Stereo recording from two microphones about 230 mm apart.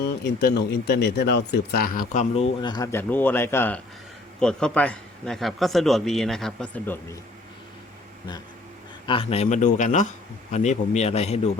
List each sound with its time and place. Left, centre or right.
0.0 s a man's voice: left; by 7.0 s centre
9.0 s a man's voice: left